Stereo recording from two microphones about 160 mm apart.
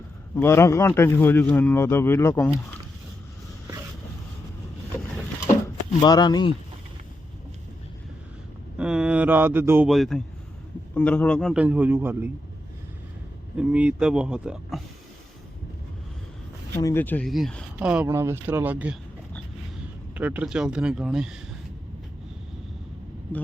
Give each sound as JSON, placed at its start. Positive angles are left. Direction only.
{"t": 0.3, "sound": "speech", "side_deg": 15}
{"t": 6.0, "sound": "speech", "side_deg": 25}
{"t": 8.8, "sound": "speech", "side_deg": -5}
{"t": 9.9, "sound": "speech", "side_deg": 0}
{"t": 11.5, "sound": "speech", "side_deg": -10}
{"t": 13.6, "sound": "speech", "side_deg": -5}
{"t": 16.7, "sound": "speech", "side_deg": 15}
{"t": 17.2, "sound": "speech", "side_deg": 0}
{"t": 17.7, "sound": "speech", "side_deg": -10}
{"t": 20.1, "sound": "speech", "side_deg": -10}